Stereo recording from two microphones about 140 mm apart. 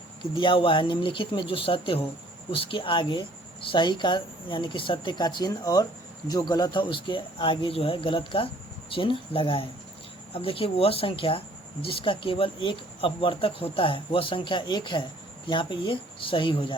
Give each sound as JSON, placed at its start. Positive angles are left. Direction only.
{"t": 0.2, "sound": "speech", "side_deg": 35}